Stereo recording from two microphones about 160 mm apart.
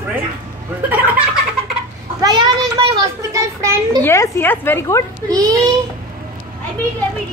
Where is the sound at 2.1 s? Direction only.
25° right (ahead or behind).